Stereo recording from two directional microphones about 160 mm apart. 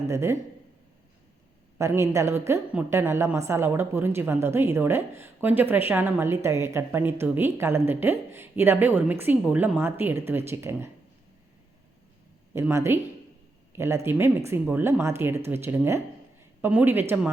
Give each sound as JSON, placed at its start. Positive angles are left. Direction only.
{"t": 0.1, "sound": "a woman's voice", "side_deg": -15}
{"t": 1.8, "sound": "a woman's voice", "side_deg": -15}
{"t": 12.5, "sound": "a woman's voice", "side_deg": -15}